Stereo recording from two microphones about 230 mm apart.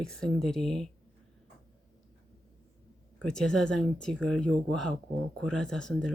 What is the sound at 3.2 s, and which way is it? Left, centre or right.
Speech, centre.